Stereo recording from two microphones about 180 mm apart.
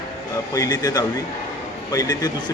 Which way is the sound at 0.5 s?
20° left (ahead or behind).